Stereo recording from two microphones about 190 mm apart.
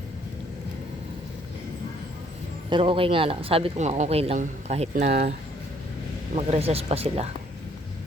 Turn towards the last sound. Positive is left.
turn(degrees=-30)  # may be behind; listen again after turning